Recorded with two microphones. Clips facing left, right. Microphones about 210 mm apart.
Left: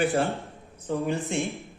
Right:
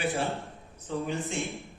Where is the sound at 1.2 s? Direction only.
Centre (ahead or behind).